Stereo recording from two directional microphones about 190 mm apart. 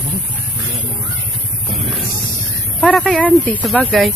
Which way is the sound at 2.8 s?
5° left (ahead or behind).